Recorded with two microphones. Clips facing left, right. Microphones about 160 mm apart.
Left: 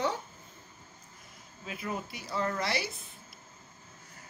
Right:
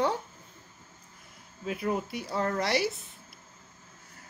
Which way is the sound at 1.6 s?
55° right (ahead or behind).